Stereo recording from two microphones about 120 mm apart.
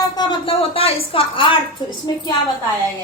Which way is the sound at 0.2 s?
45° left (ahead or behind).